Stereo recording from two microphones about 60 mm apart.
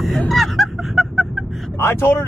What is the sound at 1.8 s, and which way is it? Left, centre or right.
Speech, left.